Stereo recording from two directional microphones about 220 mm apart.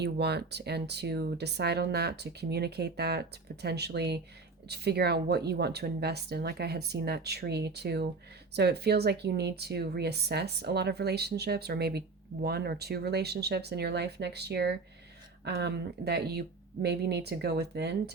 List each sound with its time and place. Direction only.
0.0 s speech: 50° right (ahead or behind)